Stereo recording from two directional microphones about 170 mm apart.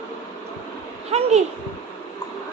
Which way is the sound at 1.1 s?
40° right (ahead or behind).